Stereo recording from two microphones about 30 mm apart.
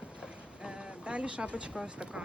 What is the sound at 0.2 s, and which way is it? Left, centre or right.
Speech, right.